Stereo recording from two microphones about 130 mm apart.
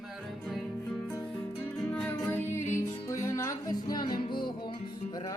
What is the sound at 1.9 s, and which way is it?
Music, 15° left (ahead or behind).